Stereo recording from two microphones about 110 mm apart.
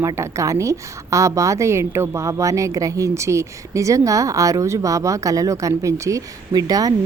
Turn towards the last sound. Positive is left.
turn(degrees=-35)  # may be behind; listen again after turning